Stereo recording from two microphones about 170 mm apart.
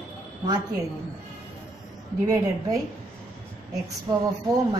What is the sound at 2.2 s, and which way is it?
Speech, 20° right (ahead or behind).